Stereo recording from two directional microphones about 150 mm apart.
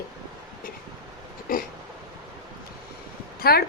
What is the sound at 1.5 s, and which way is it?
Burping, 70° left (ahead or behind).